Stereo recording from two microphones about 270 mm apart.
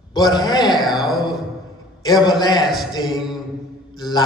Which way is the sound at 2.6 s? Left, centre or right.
Centre.